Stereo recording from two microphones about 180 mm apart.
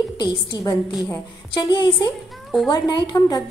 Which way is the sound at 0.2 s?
25° left (ahead or behind).